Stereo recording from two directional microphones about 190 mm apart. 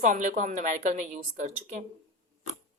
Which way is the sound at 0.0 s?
40° right (ahead or behind).